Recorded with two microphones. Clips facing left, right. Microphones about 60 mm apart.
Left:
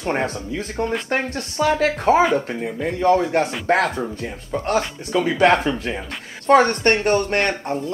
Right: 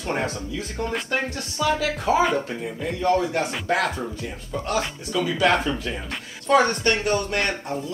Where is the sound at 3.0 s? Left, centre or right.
Left.